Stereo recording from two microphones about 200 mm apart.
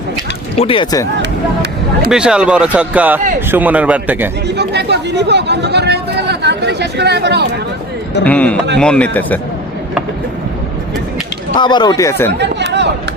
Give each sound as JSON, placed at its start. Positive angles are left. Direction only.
{"t": 0.5, "sound": "speech", "side_deg": 30}
{"t": 2.0, "sound": "a man's voice", "side_deg": -5}
{"t": 4.4, "sound": "speech", "side_deg": -55}
{"t": 8.2, "sound": "a man's voice", "side_deg": 5}
{"t": 11.5, "sound": "speech", "side_deg": 20}
{"t": 12.4, "sound": "chatter", "side_deg": -60}